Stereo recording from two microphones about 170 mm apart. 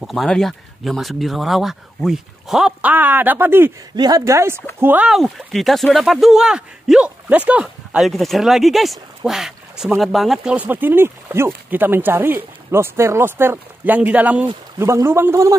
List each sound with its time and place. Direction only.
0.0 s speech: centre (ahead or behind)
3.9 s speech: 25° right (ahead or behind)